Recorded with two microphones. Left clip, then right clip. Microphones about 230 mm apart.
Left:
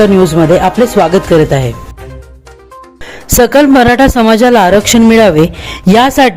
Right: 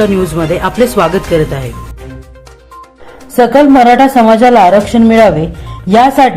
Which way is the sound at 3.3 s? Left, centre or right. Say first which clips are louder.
Even; left.